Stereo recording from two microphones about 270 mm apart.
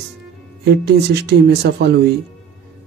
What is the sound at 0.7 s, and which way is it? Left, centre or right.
Speech, right.